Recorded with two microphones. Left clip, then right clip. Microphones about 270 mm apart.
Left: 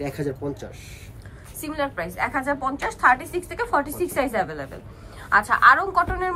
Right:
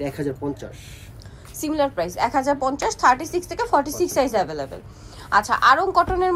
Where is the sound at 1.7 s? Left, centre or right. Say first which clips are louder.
Right 5 dB; centre.